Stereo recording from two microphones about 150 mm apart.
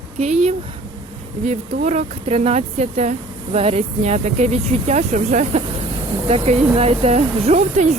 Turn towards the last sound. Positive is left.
turn(degrees=-50)  # may be behind; listen again after turning